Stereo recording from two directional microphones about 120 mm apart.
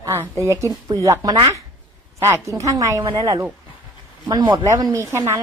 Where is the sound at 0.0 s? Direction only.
25° right (ahead or behind).